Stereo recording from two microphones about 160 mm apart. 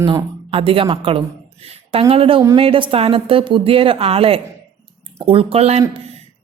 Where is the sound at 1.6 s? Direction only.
40° right (ahead or behind).